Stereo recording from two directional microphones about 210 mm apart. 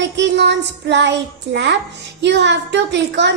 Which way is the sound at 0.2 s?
55° right (ahead or behind).